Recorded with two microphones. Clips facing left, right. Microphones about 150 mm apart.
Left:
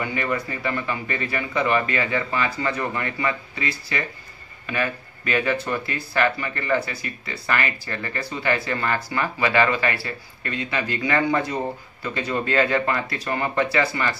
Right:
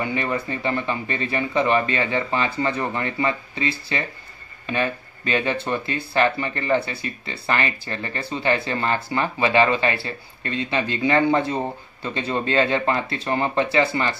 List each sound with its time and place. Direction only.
0.0 s speech: 25° right (ahead or behind)